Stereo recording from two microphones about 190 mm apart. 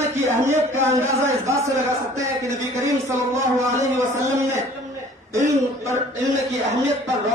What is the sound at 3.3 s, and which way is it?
A man's voice, 15° right (ahead or behind).